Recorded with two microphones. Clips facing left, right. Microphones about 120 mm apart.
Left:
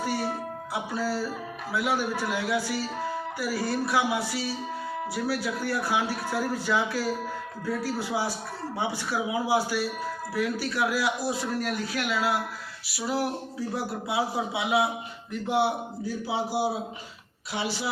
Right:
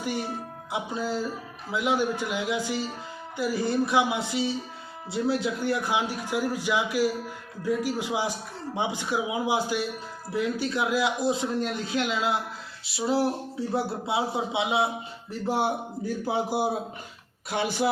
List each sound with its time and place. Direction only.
0.7 s a man's voice: 20° right (ahead or behind)
15.3 s speech: 40° right (ahead or behind)